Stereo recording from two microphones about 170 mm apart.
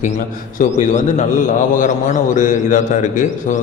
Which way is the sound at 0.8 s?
45° left (ahead or behind).